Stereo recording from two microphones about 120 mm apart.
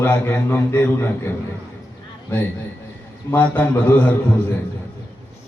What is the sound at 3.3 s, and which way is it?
Speech, 15° left (ahead or behind).